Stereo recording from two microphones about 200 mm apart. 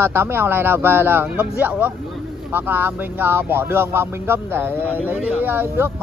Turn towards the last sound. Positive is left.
turn(degrees=-10)  # may be behind; listen again after turning